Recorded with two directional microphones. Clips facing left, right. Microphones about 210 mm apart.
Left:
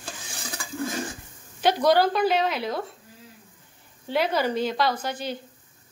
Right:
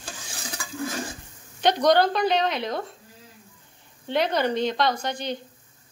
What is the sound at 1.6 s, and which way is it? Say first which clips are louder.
A woman's voice: right 1 dB; 5° left (ahead or behind).